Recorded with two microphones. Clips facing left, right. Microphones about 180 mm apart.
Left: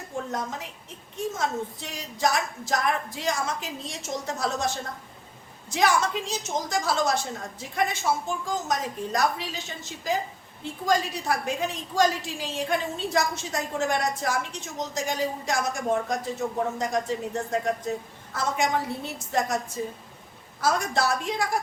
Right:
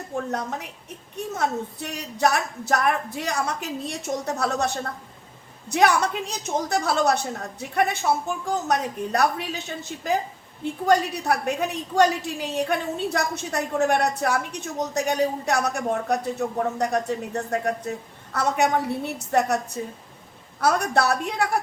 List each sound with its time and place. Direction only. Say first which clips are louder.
0.3 s a woman's voice: right 3 dB; 65° right (ahead or behind)